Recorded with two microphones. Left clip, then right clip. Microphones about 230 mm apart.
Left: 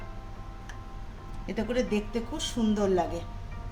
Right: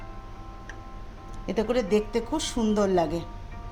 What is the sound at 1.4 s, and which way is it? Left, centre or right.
Speech, right.